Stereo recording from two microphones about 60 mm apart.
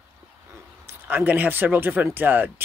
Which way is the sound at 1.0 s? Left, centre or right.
Right.